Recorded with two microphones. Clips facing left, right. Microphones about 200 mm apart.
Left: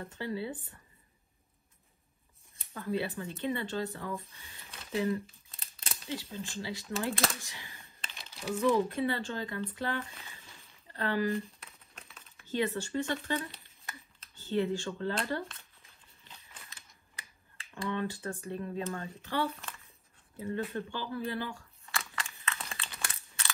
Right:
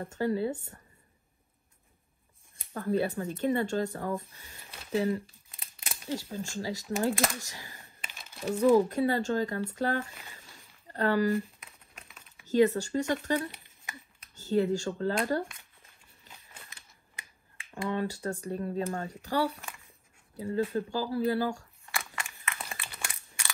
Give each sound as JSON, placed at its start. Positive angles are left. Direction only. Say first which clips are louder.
{"t": 0.0, "sound": "speech", "louder": "right 7 dB", "side_deg": -45}
{"t": 2.5, "sound": "speech", "louder": "right 5 dB", "side_deg": -50}
{"t": 4.9, "sound": "speech", "louder": "right 3 dB", "side_deg": -30}
{"t": 5.8, "sound": "a sound", "louder": "right 4 dB", "side_deg": -15}
{"t": 6.1, "sound": "speech", "louder": "right 4 dB", "side_deg": -45}
{"t": 11.6, "sound": "a sound", "louder": "even", "side_deg": -5}
{"t": 12.4, "sound": "speech", "louder": "right 8 dB", "side_deg": -40}
{"t": 13.5, "sound": "a sound", "louder": "right 2 dB", "side_deg": -15}
{"t": 14.3, "sound": "speech", "louder": "right 4 dB", "side_deg": -40}
{"t": 16.3, "sound": "scissors", "louder": "right 1 dB", "side_deg": -40}
{"t": 17.1, "sound": "finger snapping", "louder": "right 1 dB", "side_deg": -20}
{"t": 17.8, "sound": "speech", "louder": "right 3 dB", "side_deg": -40}
{"t": 21.9, "sound": "crunch", "louder": "right 1 dB", "side_deg": -15}